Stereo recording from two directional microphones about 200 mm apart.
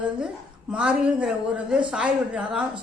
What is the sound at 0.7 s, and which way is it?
A woman's voice, 5° right (ahead or behind).